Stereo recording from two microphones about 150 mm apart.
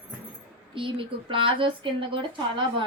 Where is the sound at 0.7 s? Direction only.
35° right (ahead or behind).